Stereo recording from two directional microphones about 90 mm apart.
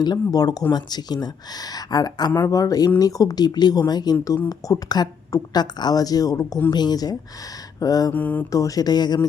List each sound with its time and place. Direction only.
0.0 s a woman's voice: 50° left (ahead or behind)
8.1 s mantra: 20° left (ahead or behind)
8.5 s a woman's voice: 40° left (ahead or behind)